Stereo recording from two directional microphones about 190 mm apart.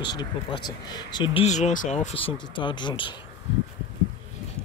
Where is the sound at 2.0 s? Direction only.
30° left (ahead or behind).